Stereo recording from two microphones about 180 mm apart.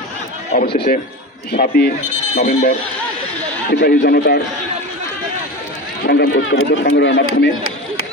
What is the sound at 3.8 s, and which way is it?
Speech, 60° left (ahead or behind).